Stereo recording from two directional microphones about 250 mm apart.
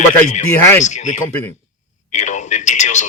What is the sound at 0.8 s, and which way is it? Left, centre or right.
Speech, left.